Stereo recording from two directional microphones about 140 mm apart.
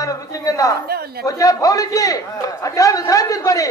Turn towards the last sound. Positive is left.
turn(degrees=25)  # may be behind; listen again after turning